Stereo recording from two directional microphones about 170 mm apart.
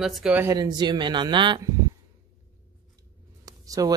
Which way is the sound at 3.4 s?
20° right (ahead or behind).